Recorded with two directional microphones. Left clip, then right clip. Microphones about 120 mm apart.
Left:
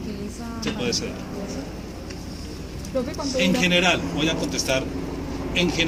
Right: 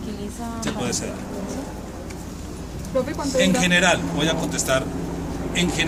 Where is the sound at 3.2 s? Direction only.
35° right (ahead or behind).